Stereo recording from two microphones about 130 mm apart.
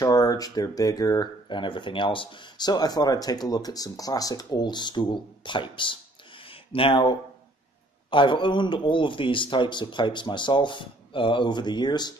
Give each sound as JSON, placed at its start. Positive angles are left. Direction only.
{"t": 0.0, "sound": "speech", "side_deg": 30}